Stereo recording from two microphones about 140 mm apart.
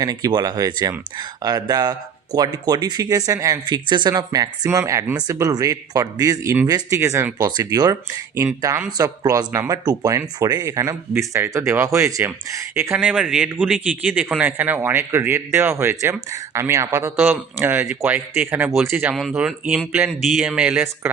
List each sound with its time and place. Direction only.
0.0 s speech: 25° right (ahead or behind)
13.1 s a man's voice: 5° right (ahead or behind)